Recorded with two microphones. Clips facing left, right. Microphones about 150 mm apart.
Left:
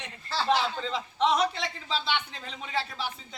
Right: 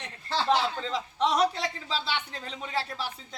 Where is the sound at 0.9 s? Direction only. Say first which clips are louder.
Even; 35° right (ahead or behind).